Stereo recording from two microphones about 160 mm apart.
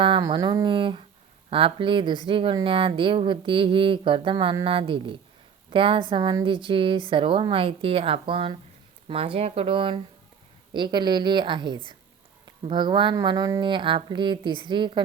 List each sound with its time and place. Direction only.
0.0 s speech: 30° right (ahead or behind)